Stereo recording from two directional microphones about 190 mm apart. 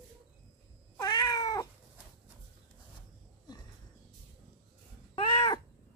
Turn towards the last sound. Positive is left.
turn(degrees=20)  # may be behind; listen again after turning